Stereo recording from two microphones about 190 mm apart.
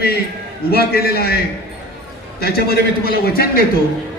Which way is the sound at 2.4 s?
55° left (ahead or behind).